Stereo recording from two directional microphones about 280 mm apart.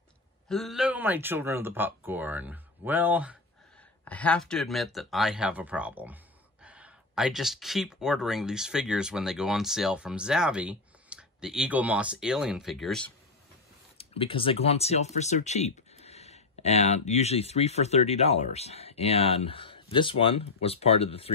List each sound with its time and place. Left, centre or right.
0.5 s speech: centre
4.0 s speech: centre
13.9 s speech: centre